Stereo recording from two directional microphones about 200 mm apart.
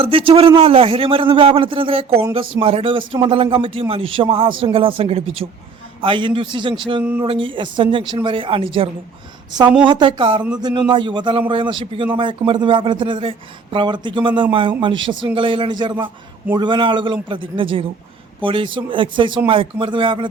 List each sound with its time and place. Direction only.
0.0 s speech: 25° right (ahead or behind)